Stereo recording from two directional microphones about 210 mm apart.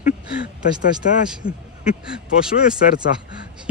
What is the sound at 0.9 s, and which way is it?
Speech, 5° right (ahead or behind).